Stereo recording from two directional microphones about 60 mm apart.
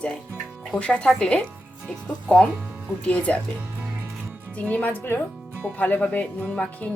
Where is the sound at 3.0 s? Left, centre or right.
Left.